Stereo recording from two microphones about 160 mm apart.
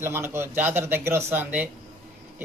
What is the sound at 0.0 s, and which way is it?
Speech, 15° right (ahead or behind).